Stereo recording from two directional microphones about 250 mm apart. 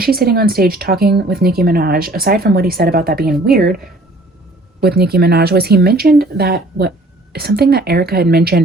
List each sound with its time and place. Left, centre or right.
0.0 s speech: right
4.8 s speech: right